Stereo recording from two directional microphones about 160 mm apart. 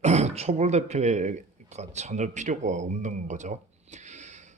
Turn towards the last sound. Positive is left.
turn(degrees=-45)  # may be behind; listen again after turning